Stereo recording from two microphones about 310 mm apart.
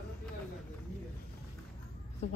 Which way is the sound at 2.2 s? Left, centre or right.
Centre.